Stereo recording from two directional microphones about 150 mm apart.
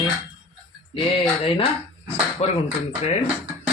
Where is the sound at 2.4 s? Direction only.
45° left (ahead or behind).